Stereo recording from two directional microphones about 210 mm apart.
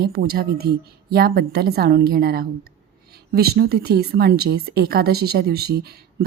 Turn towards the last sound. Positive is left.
turn(degrees=-50)  # may be behind; listen again after turning